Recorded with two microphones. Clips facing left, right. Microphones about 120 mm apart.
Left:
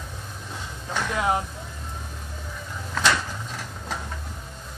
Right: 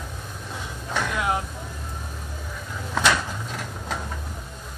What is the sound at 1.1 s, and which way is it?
Vehicle, 30° left (ahead or behind).